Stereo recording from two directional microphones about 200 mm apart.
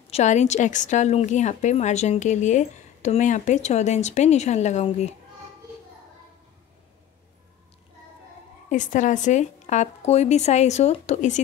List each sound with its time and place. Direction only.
0.1 s a woman's voice: 35° left (ahead or behind)
8.6 s a woman's voice: 40° left (ahead or behind)